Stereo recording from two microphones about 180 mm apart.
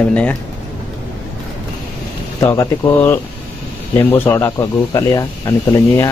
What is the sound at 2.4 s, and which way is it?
Speech, 15° left (ahead or behind).